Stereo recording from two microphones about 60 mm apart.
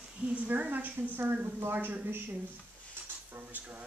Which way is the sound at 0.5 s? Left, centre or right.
Right.